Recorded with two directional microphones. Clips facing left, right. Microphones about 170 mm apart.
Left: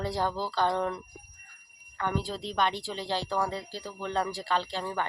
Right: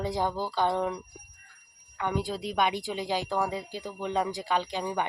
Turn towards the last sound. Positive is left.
turn(degrees=-15)  # may be behind; listen again after turning